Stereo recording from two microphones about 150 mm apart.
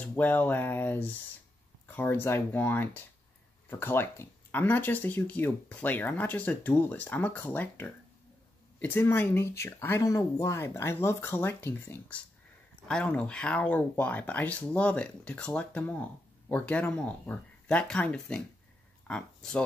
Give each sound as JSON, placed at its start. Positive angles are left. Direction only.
{"t": 0.0, "sound": "speech", "side_deg": 10}